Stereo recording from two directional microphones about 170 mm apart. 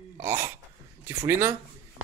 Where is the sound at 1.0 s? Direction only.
15° right (ahead or behind).